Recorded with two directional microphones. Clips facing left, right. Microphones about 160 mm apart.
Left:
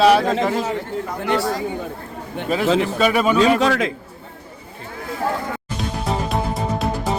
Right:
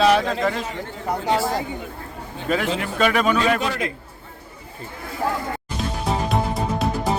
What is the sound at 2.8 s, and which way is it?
Speech, 5° left (ahead or behind).